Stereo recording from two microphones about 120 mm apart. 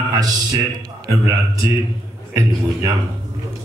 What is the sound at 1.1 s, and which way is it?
Speech, 30° right (ahead or behind).